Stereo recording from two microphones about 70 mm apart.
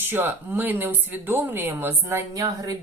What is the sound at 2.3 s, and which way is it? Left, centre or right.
Speech, right.